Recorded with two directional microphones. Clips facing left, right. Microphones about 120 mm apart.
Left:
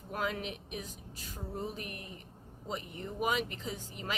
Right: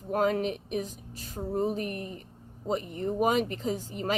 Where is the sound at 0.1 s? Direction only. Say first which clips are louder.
Right 10 dB; 40° right (ahead or behind).